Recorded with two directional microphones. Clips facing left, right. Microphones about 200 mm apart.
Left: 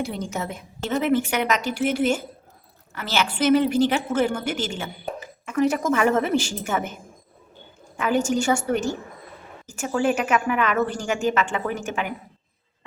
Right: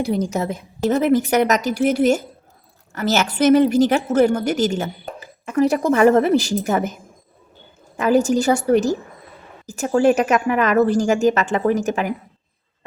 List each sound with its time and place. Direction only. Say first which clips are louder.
0.0 s a woman's voice: right 7 dB; 35° right (ahead or behind)
7.9 s a woman's voice: right 6 dB; 40° right (ahead or behind)